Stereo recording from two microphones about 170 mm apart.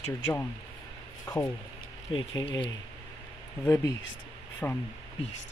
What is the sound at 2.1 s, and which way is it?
Speech, 30° left (ahead or behind).